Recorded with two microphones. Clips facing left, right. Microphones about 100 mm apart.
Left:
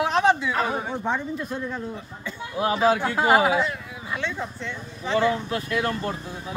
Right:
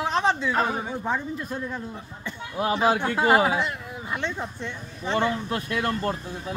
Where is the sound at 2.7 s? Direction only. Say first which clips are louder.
Left 1 dB; 20° right (ahead or behind).